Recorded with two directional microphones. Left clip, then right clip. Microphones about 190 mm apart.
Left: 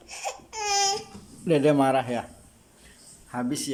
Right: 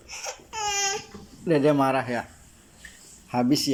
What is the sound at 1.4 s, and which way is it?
Speech, 15° left (ahead or behind).